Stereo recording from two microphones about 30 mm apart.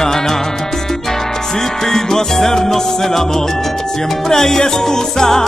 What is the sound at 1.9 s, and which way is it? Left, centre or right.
Music, centre.